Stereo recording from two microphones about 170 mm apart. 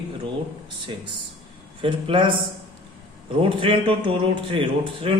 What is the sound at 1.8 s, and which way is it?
A man's voice, 30° right (ahead or behind).